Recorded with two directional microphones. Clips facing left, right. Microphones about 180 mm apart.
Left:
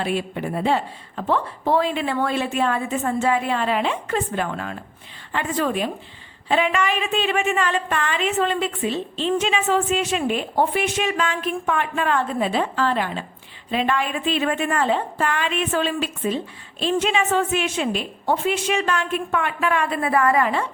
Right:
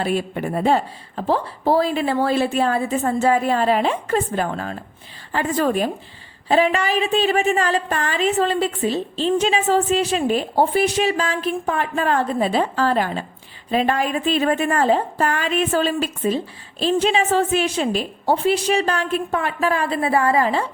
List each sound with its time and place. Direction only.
0.0 s a woman's voice: 40° right (ahead or behind)